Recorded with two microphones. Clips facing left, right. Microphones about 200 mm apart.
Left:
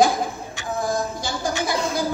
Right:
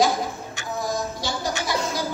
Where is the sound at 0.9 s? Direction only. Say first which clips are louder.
Left 1 dB; 50° left (ahead or behind).